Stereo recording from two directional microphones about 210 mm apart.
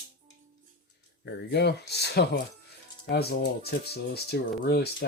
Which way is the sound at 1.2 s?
55° left (ahead or behind).